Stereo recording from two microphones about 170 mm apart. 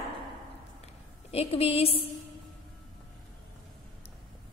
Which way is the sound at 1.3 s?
35° left (ahead or behind).